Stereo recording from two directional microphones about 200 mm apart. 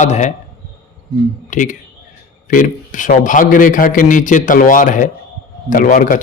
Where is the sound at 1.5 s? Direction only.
40° left (ahead or behind).